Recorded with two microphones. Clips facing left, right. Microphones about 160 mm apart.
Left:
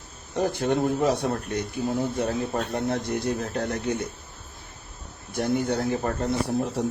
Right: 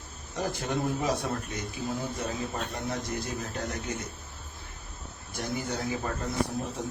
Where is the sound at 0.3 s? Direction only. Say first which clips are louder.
Left 7 dB; 60° left (ahead or behind).